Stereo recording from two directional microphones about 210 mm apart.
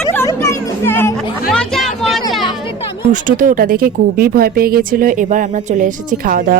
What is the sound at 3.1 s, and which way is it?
Speech, 40° right (ahead or behind).